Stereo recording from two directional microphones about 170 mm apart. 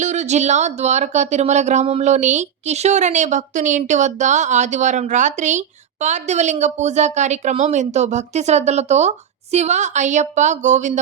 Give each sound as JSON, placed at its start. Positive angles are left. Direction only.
{"t": 0.0, "sound": "speech", "side_deg": -40}